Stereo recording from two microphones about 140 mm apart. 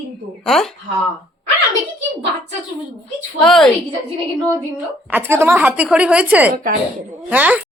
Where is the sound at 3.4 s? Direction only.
5° left (ahead or behind).